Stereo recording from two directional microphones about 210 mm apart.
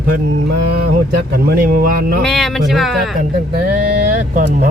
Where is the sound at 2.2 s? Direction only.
Centre (ahead or behind).